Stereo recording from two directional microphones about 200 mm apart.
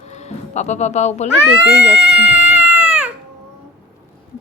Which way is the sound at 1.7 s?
5° right (ahead or behind).